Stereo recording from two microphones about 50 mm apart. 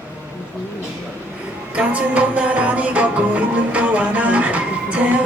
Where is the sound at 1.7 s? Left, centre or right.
Right.